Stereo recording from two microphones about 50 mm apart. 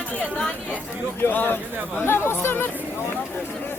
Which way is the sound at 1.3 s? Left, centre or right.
Left.